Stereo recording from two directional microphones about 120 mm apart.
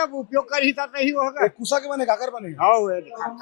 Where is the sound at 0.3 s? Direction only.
20° left (ahead or behind).